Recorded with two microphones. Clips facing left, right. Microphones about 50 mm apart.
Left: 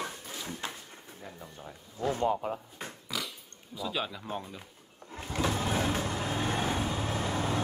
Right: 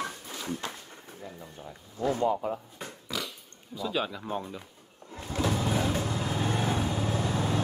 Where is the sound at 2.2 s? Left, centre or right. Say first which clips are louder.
Right 2 dB; left.